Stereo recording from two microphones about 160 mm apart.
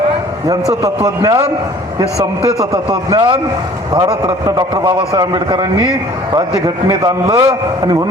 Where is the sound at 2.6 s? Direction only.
25° right (ahead or behind).